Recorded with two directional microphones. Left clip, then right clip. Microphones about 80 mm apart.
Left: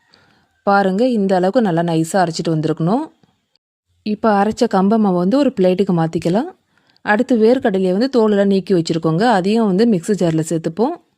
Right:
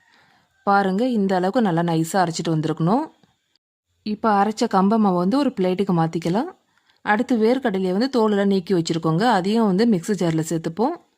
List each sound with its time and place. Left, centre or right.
0.6 s speech: left
4.0 s speech: left